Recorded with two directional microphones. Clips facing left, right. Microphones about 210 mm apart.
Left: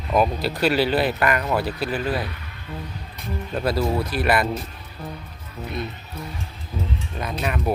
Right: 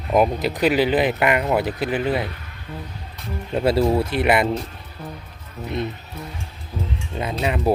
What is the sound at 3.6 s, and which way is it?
Speech, 25° right (ahead or behind).